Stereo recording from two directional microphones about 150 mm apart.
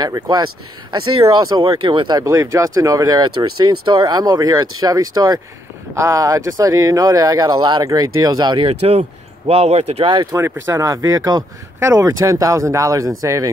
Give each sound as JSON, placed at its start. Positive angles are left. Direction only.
{"t": 0.0, "sound": "speech", "side_deg": -25}
{"t": 10.3, "sound": "speech", "side_deg": -15}